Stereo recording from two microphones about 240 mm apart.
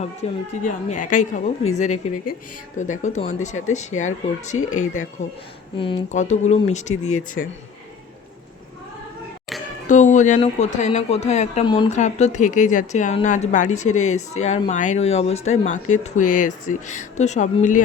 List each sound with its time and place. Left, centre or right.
0.0 s a woman's voice: left
9.8 s speech: left